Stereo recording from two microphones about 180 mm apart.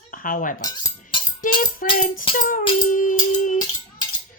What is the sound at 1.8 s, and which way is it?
Speech, 50° left (ahead or behind).